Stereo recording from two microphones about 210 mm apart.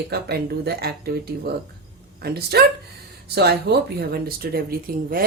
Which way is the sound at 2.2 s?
50° right (ahead or behind).